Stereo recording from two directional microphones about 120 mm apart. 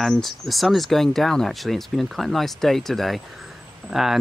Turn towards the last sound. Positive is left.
turn(degrees=0)  # may be behind; listen again after turning